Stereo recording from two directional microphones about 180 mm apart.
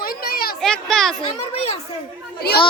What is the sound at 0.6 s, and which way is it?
Speech, 5° left (ahead or behind).